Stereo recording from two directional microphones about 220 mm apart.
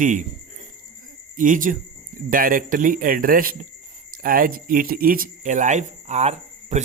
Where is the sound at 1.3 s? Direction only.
35° right (ahead or behind).